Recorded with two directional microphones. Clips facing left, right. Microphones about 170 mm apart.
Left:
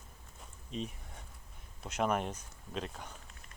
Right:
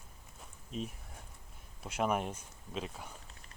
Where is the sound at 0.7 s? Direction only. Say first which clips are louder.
Even; 5° right (ahead or behind).